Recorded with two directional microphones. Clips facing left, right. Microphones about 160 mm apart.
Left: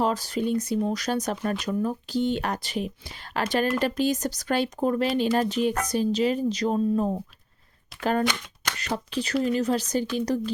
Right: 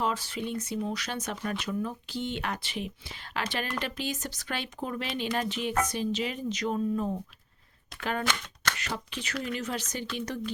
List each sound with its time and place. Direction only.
0.0 s speech: 40° left (ahead or behind)
8.2 s speech: 15° left (ahead or behind)
8.9 s speech: 35° left (ahead or behind)